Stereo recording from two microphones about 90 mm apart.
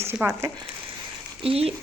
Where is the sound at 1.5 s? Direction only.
90° right.